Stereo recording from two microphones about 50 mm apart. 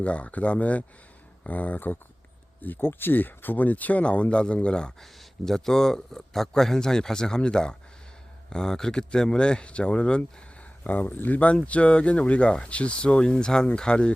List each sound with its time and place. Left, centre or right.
0.0 s speech: left
10.8 s speech: left; by 14.1 s centre